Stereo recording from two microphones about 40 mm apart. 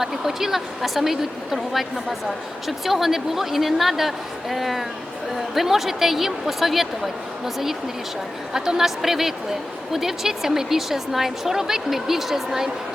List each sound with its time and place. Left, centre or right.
0.0 s a woman's voice: centre